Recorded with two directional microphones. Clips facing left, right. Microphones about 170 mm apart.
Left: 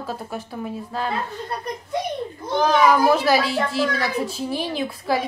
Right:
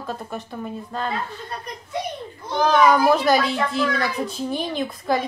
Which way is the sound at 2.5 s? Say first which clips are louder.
Even; 5° left (ahead or behind).